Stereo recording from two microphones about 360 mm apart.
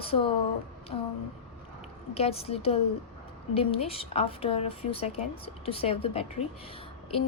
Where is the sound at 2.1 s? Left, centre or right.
Centre.